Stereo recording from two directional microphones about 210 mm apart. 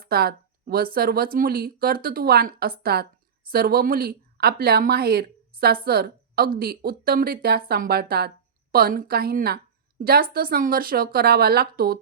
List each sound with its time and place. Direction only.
0.0 s speech: 45° right (ahead or behind)